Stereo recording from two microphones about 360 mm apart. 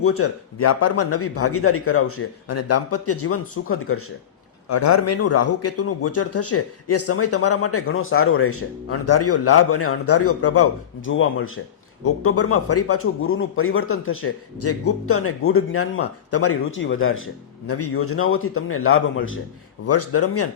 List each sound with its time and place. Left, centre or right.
0.0 s a man's voice: left
4.7 s a man's voice: left